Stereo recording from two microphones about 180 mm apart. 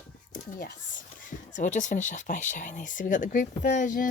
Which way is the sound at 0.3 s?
50° left (ahead or behind).